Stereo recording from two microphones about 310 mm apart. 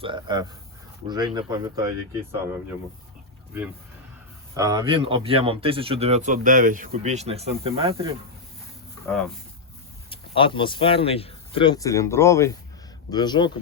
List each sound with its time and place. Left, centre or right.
0.0 s speech: centre
4.5 s speech: centre
9.0 s speech: centre
10.1 s speech: centre